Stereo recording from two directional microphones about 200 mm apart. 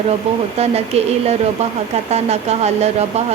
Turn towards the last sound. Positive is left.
turn(degrees=-35)  # may be behind; listen again after turning